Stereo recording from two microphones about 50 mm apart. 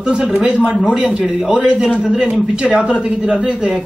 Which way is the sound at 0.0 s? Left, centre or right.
Centre.